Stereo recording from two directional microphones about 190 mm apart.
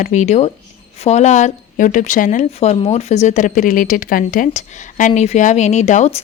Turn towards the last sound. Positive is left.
turn(degrees=35)  # may be behind; listen again after turning